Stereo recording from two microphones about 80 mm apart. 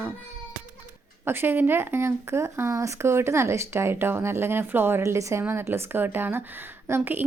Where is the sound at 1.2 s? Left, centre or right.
Right.